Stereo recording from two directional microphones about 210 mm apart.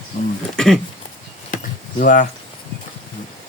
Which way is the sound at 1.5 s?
40° left (ahead or behind).